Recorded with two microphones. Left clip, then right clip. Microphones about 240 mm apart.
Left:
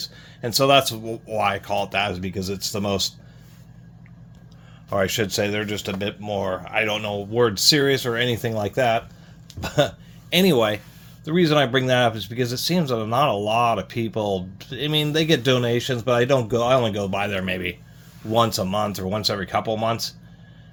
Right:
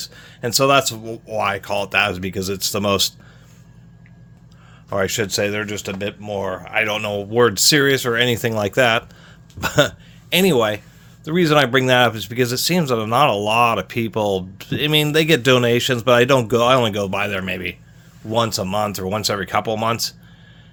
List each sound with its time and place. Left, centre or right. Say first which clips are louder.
0.0 s speech: right 3 dB; right
4.9 s a man's voice: right 2 dB; centre; by 10.3 s right
10.3 s speech: right 2 dB; centre